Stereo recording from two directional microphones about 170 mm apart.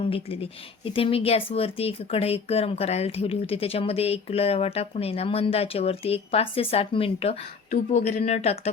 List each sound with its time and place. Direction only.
0.0 s speech: 30° left (ahead or behind)